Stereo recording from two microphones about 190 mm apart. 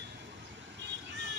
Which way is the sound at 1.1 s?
65° right (ahead or behind).